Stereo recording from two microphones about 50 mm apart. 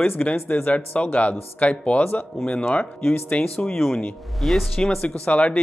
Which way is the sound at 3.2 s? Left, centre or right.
Left.